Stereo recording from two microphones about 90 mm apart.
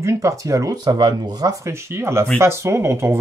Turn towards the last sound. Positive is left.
turn(degrees=-30)  # may be behind; listen again after turning